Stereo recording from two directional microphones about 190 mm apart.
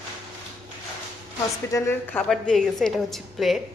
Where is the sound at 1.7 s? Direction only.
10° left (ahead or behind).